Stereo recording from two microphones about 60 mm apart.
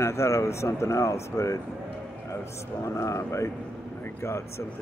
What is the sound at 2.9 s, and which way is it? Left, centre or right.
Speech, left.